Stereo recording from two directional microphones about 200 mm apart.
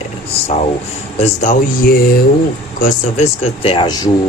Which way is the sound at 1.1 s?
35° left (ahead or behind).